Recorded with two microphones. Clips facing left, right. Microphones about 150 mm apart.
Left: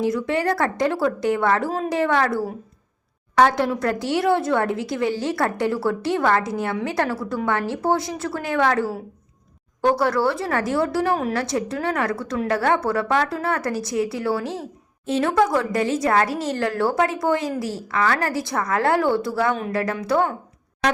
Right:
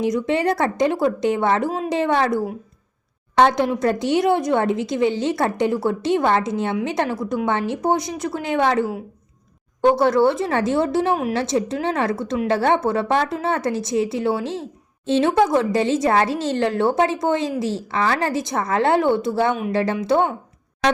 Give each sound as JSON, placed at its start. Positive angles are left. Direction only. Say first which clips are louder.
{"t": 0.0, "sound": "speech", "louder": "right 2 dB", "side_deg": -20}
{"t": 11.1, "sound": "a woman's voice", "louder": "right 1 dB", "side_deg": -10}
{"t": 11.3, "sound": "speech", "louder": "right 3 dB", "side_deg": -20}